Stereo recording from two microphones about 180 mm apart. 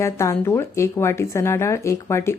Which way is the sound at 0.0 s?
15° left (ahead or behind).